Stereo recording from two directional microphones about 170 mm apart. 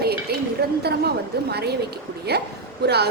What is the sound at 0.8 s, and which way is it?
A woman's voice, 70° right (ahead or behind).